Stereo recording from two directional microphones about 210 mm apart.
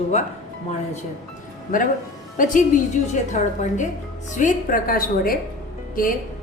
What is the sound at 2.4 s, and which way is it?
A woman's voice, 40° left (ahead or behind).